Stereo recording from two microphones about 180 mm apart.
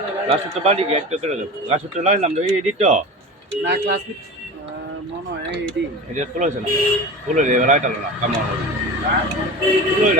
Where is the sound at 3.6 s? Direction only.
70° right (ahead or behind).